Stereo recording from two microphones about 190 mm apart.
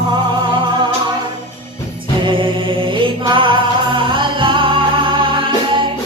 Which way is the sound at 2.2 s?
25° right (ahead or behind).